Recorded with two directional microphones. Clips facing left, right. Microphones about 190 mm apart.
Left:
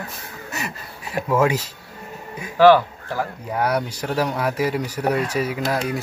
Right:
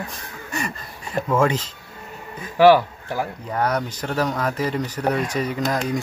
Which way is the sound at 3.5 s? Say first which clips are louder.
Left 1 dB; 10° left (ahead or behind).